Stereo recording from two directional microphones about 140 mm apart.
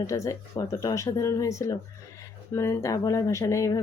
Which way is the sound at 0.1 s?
25° left (ahead or behind).